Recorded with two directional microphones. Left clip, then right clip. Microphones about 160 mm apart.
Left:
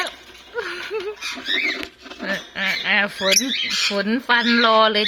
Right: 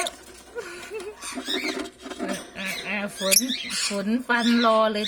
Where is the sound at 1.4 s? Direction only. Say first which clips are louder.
Left 7 dB; 10° right (ahead or behind).